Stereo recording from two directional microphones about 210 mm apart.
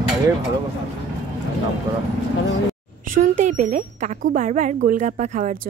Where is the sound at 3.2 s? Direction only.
35° right (ahead or behind).